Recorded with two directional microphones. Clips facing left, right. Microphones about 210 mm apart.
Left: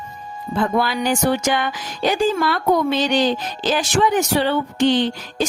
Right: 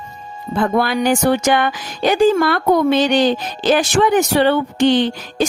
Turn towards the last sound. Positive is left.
turn(degrees=-60)  # may be behind; listen again after turning